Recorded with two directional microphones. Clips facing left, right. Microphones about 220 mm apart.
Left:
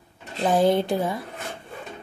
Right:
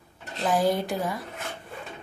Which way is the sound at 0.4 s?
25° left (ahead or behind).